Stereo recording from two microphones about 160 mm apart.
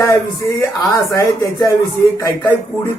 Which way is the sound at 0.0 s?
20° left (ahead or behind).